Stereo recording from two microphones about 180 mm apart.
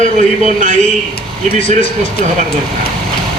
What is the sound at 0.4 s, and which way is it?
Speech, 45° right (ahead or behind).